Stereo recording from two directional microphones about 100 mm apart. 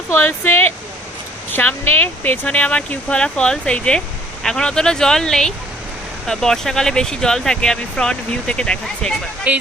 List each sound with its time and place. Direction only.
0.1 s speech: 20° left (ahead or behind)
9.5 s speech: 15° right (ahead or behind)